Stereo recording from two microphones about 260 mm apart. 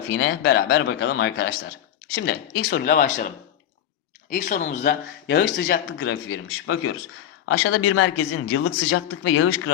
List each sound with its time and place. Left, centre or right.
0.1 s speech: left
6.0 s speech: left